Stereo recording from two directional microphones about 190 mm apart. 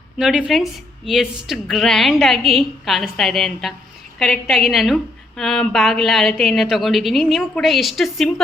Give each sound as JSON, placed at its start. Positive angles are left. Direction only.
{"t": 0.2, "sound": "a woman's voice", "side_deg": -5}